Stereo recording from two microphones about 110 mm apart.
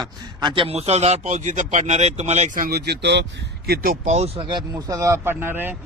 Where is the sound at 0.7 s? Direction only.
75° right (ahead or behind).